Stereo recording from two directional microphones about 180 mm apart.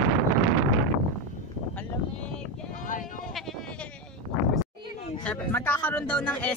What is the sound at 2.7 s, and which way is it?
Sheep, 45° left (ahead or behind).